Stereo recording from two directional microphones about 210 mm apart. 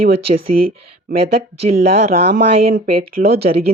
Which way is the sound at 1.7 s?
45° right (ahead or behind).